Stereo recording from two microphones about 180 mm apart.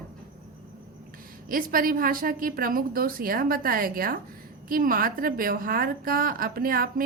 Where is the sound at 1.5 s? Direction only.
50° right (ahead or behind).